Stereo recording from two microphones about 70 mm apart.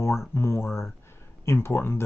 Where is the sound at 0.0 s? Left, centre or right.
Left.